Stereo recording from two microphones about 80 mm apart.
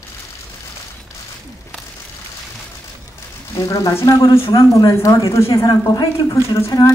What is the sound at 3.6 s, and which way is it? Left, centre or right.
A woman's voice, left.